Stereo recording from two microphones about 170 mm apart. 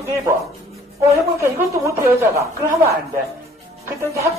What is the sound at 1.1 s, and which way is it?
Speech, 15° right (ahead or behind).